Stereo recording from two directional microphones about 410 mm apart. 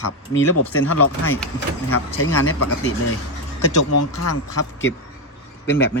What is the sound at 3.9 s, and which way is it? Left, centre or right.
Speech, left.